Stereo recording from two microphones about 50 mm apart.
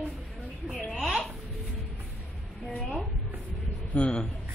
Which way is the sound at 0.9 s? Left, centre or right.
Centre.